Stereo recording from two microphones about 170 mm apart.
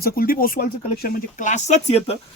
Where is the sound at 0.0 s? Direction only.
60° left (ahead or behind).